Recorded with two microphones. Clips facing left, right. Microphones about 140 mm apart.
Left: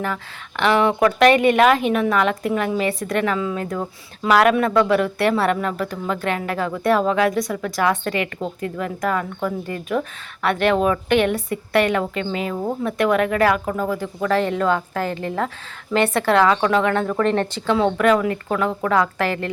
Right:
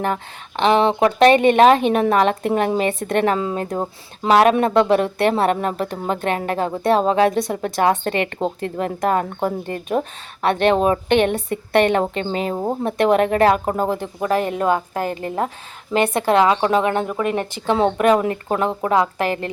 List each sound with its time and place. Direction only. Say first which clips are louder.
0.5 s speech: right 2 dB; 25° right (ahead or behind)